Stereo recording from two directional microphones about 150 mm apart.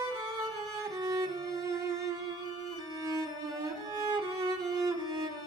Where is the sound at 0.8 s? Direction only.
25° right (ahead or behind).